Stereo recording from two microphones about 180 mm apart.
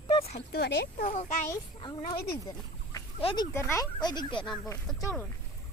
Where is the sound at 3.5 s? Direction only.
15° left (ahead or behind).